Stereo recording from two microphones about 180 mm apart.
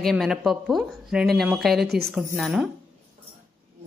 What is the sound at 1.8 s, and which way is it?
Speech, 65° right (ahead or behind).